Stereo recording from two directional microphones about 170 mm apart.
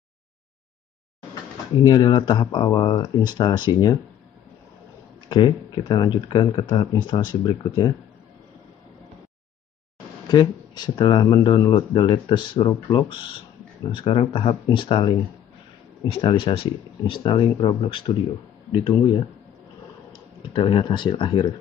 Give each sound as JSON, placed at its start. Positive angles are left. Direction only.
{"t": 1.8, "sound": "speech", "side_deg": 25}
{"t": 5.3, "sound": "speech", "side_deg": 25}
{"t": 10.2, "sound": "speech", "side_deg": 25}